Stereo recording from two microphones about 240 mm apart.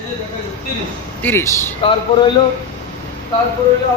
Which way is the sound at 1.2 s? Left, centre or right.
Centre.